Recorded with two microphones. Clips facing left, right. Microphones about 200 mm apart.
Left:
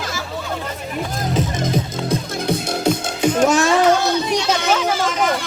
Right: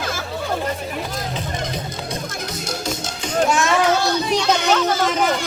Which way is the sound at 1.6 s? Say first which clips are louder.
Left 6 dB; 50° left (ahead or behind).